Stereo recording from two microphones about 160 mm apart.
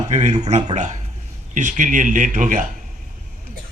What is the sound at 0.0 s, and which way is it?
A man's voice, 45° right (ahead or behind).